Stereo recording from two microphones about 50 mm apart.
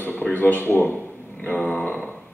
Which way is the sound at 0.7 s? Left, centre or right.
Left.